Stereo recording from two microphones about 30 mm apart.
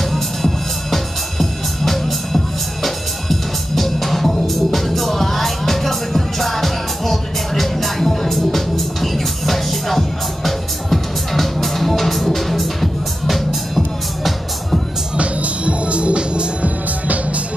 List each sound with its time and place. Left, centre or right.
0.1 s music: centre
15.1 s music: right